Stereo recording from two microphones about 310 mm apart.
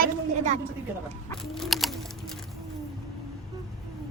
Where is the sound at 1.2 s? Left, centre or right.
Centre.